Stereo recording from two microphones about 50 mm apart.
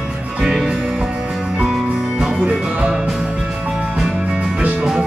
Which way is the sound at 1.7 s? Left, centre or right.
Centre.